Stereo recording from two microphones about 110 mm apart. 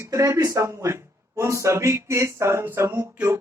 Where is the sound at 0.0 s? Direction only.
25° right (ahead or behind).